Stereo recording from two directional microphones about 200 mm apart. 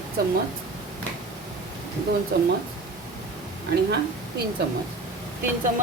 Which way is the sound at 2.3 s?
50° right (ahead or behind).